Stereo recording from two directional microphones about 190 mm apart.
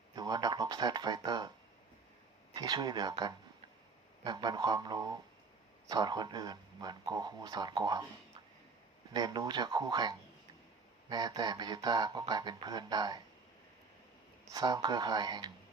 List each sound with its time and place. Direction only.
0.2 s speech: 20° right (ahead or behind)
2.6 s speech: 20° right (ahead or behind)
9.1 s speech: 20° right (ahead or behind)
14.5 s speech: 20° right (ahead or behind)